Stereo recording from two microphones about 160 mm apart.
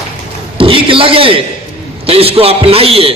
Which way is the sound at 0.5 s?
35° right (ahead or behind).